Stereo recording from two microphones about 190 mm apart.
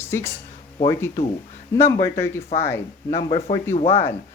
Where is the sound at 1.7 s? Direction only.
15° left (ahead or behind).